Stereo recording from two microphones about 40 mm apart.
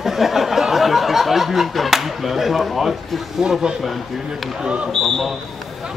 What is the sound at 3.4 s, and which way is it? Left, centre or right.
Speech, centre.